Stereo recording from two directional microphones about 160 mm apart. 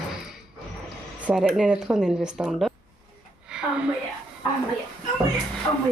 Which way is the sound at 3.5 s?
5° right (ahead or behind).